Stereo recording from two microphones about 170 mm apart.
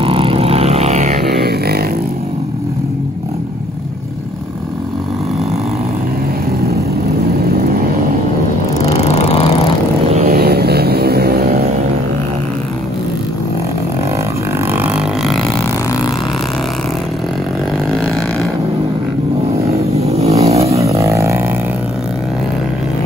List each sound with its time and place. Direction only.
0.0 s vehicle: 35° right (ahead or behind)
1.4 s vehicle: 65° right (ahead or behind)
8.9 s lawn mower: 40° left (ahead or behind)
10.2 s vehicle: 65° right (ahead or behind)
14.7 s didgeridoo: 10° right (ahead or behind)
17.9 s a sound: centre (ahead or behind)
19.7 s vehicle: 40° right (ahead or behind)
20.8 s roaring cats: 20° right (ahead or behind)